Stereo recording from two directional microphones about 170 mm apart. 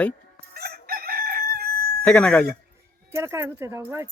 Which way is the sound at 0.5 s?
65° right (ahead or behind).